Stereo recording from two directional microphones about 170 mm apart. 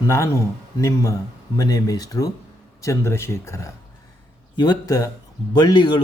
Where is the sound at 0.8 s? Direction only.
20° left (ahead or behind).